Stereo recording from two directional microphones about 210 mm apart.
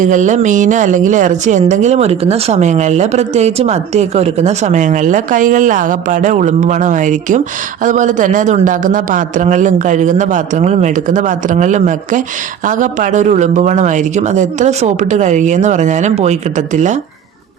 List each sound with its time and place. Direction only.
0.0 s speech: 35° right (ahead or behind)